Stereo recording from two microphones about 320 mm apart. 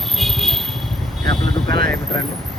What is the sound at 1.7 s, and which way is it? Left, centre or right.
Speech, right.